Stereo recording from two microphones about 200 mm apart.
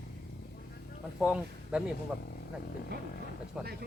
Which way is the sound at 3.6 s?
5° right (ahead or behind).